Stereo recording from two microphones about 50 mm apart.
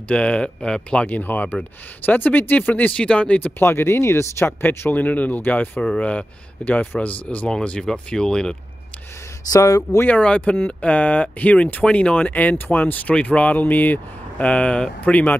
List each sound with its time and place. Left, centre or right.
0.1 s speech: left
1.0 s speech: left
3.4 s speech: left
4.9 s speech: left
5.9 s speech: left
9.6 s speech: left
10.0 s speech: left
12.5 s speech: left
14.4 s speech: left